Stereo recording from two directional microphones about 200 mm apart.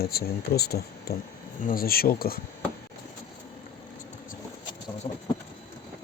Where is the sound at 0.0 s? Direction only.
50° left (ahead or behind).